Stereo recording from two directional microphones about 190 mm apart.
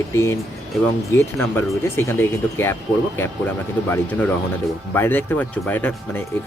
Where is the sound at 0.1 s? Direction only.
15° left (ahead or behind).